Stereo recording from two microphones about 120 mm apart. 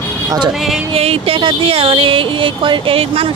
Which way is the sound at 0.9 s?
55° right (ahead or behind).